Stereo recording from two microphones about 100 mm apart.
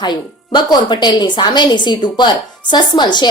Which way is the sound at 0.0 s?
45° left (ahead or behind).